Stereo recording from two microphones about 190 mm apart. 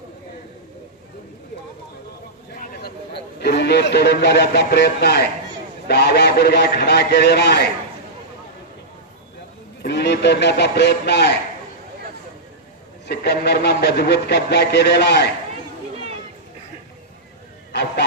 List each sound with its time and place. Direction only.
3.4 s a man's voice: 60° left (ahead or behind)
9.8 s a man's voice: 60° left (ahead or behind)
13.1 s a man's voice: 60° left (ahead or behind)
17.7 s a sound: 60° left (ahead or behind)